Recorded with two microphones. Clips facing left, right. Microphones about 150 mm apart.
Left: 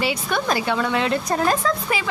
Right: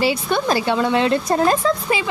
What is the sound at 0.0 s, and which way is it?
Speech, 30° right (ahead or behind).